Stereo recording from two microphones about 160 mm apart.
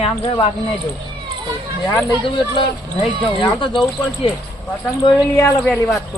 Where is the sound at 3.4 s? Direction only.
30° left (ahead or behind).